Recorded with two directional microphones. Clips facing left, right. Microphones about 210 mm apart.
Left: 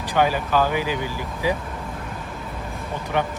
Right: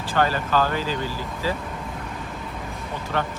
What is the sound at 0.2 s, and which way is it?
Speech, 15° left (ahead or behind).